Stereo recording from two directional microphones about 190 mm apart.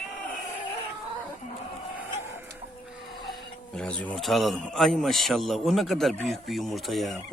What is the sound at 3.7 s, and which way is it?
A man's voice, 5° left (ahead or behind).